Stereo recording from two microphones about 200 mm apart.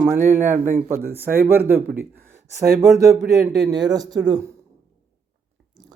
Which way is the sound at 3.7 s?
20° right (ahead or behind).